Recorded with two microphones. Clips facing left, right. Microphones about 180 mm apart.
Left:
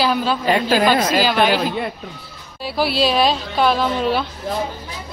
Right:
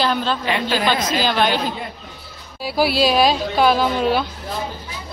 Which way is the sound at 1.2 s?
5° left (ahead or behind).